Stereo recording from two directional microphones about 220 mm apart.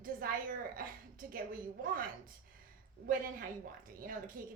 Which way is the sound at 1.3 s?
40° right (ahead or behind).